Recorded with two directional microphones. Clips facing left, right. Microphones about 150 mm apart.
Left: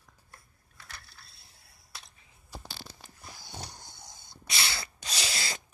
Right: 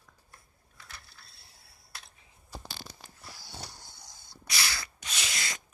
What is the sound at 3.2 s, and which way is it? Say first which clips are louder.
Dog: left 2 dB; 20° left (ahead or behind).